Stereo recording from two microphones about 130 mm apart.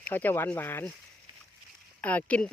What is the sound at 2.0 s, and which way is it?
Speech, 10° left (ahead or behind).